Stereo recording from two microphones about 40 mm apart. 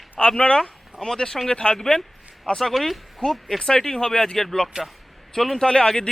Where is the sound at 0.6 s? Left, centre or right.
Centre.